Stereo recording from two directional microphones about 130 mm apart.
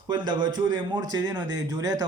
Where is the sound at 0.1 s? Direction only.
35° right (ahead or behind).